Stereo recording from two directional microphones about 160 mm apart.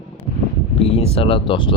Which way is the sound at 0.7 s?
35° left (ahead or behind).